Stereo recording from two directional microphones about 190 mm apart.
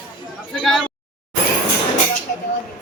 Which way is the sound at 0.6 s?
Centre (ahead or behind).